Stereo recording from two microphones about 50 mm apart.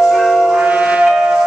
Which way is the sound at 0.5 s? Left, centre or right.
Right.